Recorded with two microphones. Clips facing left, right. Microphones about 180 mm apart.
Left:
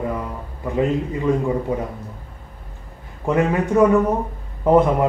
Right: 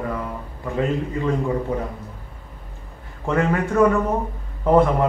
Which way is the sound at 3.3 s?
15° left (ahead or behind).